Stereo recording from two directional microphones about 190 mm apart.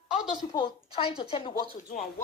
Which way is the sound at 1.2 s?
30° left (ahead or behind).